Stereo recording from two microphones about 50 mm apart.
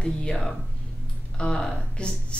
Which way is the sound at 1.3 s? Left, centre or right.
Centre.